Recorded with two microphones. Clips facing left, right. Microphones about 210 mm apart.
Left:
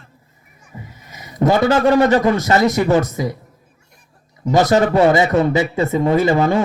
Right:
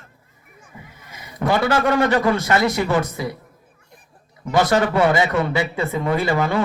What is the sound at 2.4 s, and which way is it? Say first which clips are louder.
Speech: left 4 dB; 40° left (ahead or behind).